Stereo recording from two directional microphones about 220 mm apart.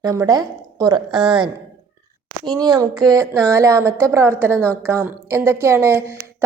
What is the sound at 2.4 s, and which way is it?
Speech, 20° right (ahead or behind).